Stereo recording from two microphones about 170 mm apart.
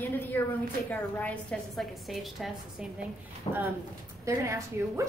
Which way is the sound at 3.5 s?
30° left (ahead or behind).